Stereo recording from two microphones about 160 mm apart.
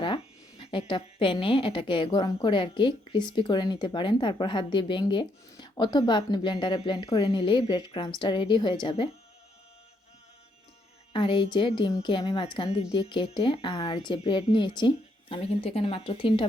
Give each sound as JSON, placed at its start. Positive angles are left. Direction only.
{"t": 0.6, "sound": "a woman's voice", "side_deg": 35}
{"t": 11.1, "sound": "a woman's voice", "side_deg": 30}